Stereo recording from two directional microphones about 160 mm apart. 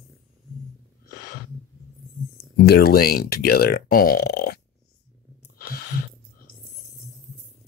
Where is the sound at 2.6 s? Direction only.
75° left (ahead or behind).